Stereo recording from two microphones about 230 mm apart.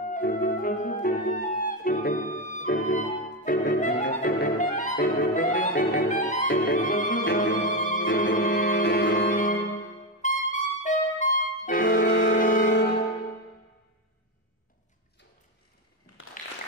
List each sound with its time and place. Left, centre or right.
0.2 s music: left
4.1 s clarinet: left
6.0 s music: left
8.0 s music: left
12.4 s music: left